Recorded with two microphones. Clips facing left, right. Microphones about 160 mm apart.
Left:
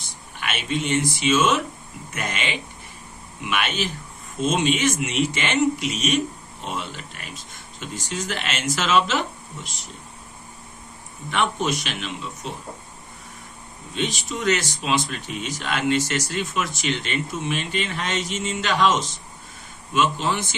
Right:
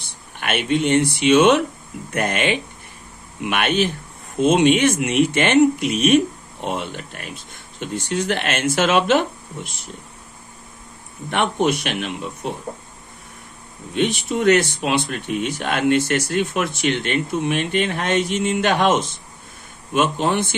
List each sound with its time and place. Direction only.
0.0 s speech: 60° right (ahead or behind)
11.3 s speech: 60° right (ahead or behind)
13.9 s speech: 60° right (ahead or behind)